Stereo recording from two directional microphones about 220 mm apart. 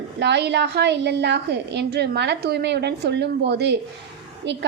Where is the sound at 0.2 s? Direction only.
50° right (ahead or behind).